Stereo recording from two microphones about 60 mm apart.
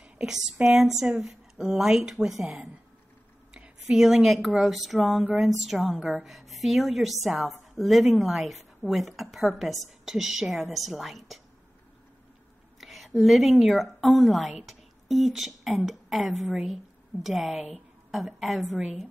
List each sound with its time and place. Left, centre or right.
0.0 s a woman's voice: centre
3.5 s a sound: centre
4.0 s a woman's voice: centre
12.8 s a woman's voice: centre